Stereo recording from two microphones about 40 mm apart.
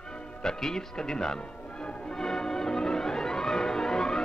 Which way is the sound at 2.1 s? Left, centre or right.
Centre.